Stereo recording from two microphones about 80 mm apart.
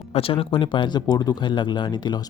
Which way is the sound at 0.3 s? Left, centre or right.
Left.